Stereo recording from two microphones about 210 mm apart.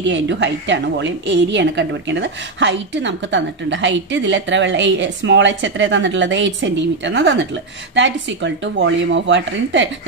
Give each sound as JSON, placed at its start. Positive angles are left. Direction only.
{"t": 0.0, "sound": "a woman's voice", "side_deg": -60}